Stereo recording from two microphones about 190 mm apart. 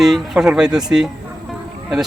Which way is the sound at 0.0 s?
Centre (ahead or behind).